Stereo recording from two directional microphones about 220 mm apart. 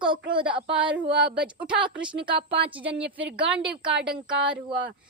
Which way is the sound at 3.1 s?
5° right (ahead or behind).